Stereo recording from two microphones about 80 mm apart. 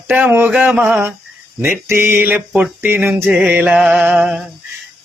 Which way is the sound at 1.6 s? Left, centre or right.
Right.